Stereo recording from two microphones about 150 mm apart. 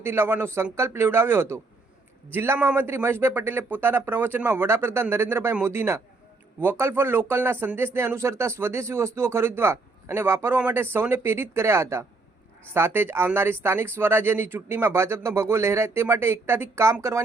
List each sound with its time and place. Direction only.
0.0 s speech: 15° right (ahead or behind)